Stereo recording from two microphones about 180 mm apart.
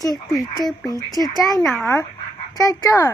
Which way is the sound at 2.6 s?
20° left (ahead or behind).